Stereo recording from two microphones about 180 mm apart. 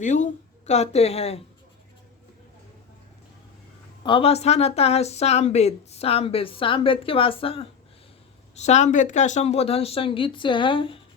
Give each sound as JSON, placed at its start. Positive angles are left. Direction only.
{"t": 0.0, "sound": "speech", "side_deg": 40}
{"t": 4.0, "sound": "speech", "side_deg": 30}